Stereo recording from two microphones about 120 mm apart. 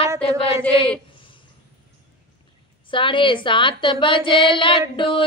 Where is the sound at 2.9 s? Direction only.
45° left (ahead or behind).